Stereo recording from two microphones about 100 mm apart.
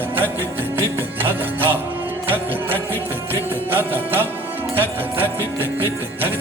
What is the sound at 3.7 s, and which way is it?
Music, 20° right (ahead or behind).